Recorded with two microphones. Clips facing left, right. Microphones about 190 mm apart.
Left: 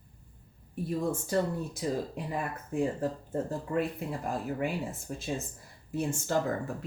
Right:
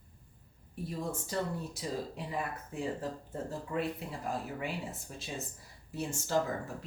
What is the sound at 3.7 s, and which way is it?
Speech, 50° left (ahead or behind).